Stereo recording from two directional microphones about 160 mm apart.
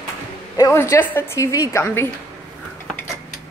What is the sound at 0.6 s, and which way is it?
A woman's voice, 20° left (ahead or behind).